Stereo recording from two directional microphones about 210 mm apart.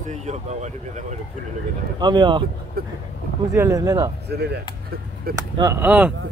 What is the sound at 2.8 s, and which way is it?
Speech, 45° right (ahead or behind).